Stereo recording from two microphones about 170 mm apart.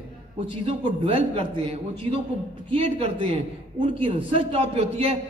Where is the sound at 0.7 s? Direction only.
35° right (ahead or behind).